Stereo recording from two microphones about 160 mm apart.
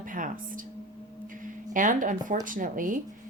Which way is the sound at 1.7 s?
55° right (ahead or behind).